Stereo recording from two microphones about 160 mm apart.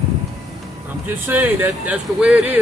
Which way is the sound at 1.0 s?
10° right (ahead or behind).